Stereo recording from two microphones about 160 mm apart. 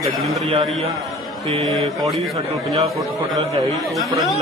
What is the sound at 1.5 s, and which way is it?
Speech, 40° right (ahead or behind).